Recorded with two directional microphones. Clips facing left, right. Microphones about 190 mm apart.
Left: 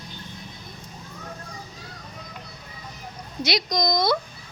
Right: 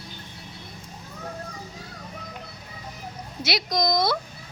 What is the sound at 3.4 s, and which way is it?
Speech, 5° right (ahead or behind).